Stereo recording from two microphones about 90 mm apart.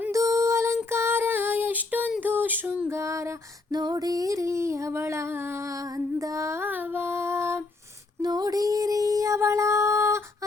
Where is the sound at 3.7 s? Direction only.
45° right (ahead or behind); by 7.6 s 30° right (ahead or behind).